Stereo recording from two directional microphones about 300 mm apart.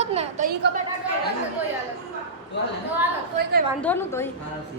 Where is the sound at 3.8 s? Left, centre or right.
Centre.